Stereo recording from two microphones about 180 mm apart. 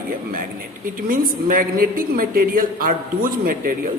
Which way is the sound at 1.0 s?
50° right (ahead or behind).